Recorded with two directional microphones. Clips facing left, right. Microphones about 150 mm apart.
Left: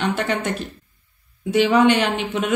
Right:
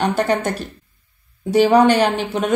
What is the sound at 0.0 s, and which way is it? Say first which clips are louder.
A woman's voice: right 4 dB; 40° right (ahead or behind).